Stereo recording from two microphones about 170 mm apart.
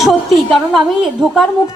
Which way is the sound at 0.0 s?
Centre (ahead or behind).